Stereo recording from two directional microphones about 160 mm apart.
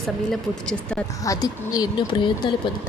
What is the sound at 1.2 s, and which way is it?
Speech, 20° left (ahead or behind).